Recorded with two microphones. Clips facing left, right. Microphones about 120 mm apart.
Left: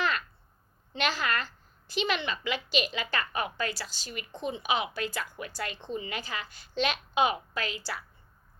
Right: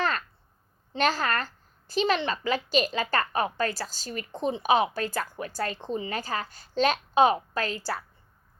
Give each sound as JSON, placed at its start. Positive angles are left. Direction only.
{"t": 0.9, "sound": "a woman's voice", "side_deg": -40}